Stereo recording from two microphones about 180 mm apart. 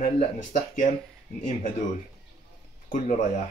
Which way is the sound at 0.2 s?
45° left (ahead or behind).